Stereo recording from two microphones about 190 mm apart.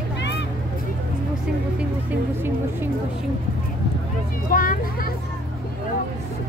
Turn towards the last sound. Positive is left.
turn(degrees=45)  # may be behind; listen again after turning